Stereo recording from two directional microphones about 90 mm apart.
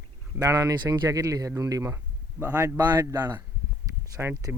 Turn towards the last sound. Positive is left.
turn(degrees=-40)  # may be behind; listen again after turning